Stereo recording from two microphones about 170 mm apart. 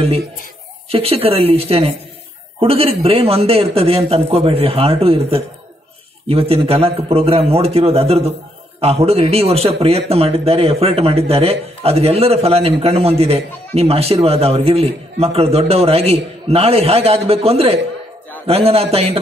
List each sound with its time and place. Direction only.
0.8 s speech: 35° right (ahead or behind)